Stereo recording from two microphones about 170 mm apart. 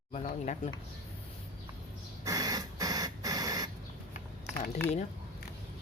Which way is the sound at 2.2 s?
20° right (ahead or behind).